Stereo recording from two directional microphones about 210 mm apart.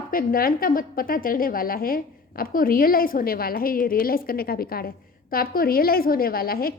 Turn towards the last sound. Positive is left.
turn(degrees=45)  # may be behind; listen again after turning